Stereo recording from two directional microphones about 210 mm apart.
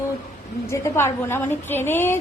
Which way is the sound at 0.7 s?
10° left (ahead or behind).